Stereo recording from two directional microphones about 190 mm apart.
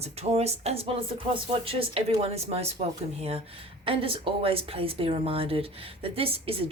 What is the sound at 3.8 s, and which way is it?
Speech, 30° right (ahead or behind).